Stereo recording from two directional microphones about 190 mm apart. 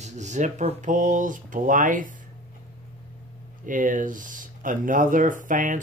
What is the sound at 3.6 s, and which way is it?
Speech, 45° right (ahead or behind).